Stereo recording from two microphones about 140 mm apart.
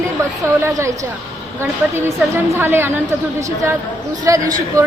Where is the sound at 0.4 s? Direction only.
20° right (ahead or behind).